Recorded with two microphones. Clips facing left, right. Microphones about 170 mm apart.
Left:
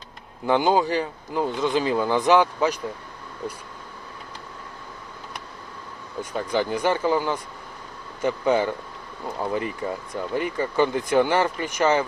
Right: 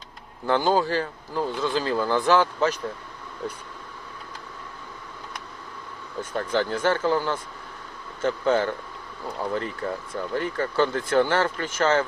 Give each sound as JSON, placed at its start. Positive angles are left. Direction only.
{"t": 0.4, "sound": "speech", "side_deg": 15}
{"t": 6.3, "sound": "speech", "side_deg": 15}